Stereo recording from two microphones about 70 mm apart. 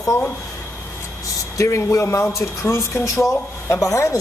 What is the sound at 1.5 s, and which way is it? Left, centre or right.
Speech, left.